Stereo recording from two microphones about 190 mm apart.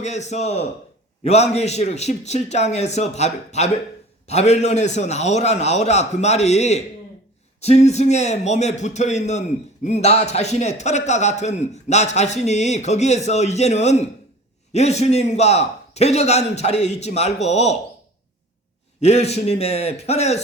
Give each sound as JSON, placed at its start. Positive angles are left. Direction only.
{"t": 0.0, "sound": "a man's voice", "side_deg": 35}
{"t": 18.9, "sound": "a man's voice", "side_deg": 35}